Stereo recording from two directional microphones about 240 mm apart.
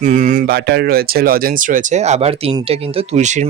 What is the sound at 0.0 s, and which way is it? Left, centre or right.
Speech, right.